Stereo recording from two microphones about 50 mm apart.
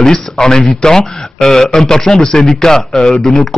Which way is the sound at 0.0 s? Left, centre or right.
Centre.